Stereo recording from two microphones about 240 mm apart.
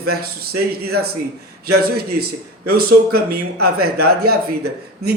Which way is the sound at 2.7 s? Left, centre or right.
Right.